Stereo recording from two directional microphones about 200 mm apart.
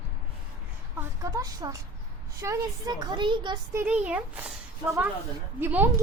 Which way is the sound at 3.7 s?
5° right (ahead or behind).